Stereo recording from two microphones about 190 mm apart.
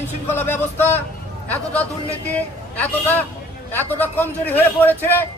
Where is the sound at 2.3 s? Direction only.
10° left (ahead or behind).